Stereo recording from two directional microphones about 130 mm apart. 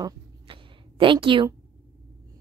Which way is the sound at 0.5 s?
45° right (ahead or behind).